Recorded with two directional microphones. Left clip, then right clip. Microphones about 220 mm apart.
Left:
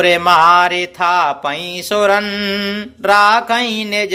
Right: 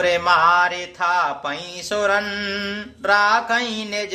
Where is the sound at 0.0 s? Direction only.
35° left (ahead or behind).